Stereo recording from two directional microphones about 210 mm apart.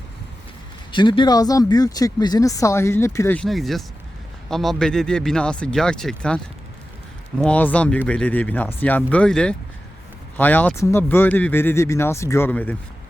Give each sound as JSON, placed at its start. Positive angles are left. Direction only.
{"t": 0.9, "sound": "speech", "side_deg": 20}